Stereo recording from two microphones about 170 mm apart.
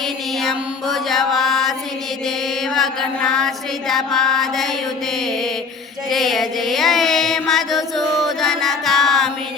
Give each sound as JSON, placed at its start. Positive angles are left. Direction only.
{"t": 0.3, "sound": "mantra", "side_deg": 0}
{"t": 2.7, "sound": "mantra", "side_deg": 0}
{"t": 6.1, "sound": "a sound", "side_deg": 0}